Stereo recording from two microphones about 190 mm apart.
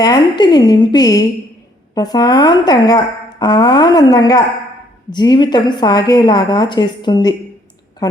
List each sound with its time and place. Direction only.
0.0 s a woman's voice: 20° left (ahead or behind)